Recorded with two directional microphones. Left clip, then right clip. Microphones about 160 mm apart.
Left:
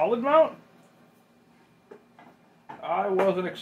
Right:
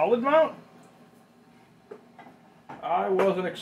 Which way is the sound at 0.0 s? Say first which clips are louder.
Even; 20° left (ahead or behind).